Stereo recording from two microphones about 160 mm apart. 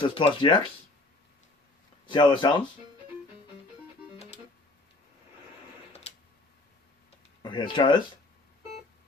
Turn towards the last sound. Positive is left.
turn(degrees=30)  # may be behind; listen again after turning